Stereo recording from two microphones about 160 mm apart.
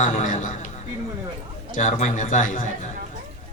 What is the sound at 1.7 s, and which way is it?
Speech, 50° left (ahead or behind).